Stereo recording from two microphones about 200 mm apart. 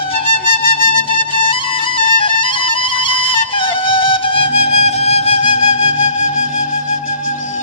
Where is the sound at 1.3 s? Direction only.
25° left (ahead or behind).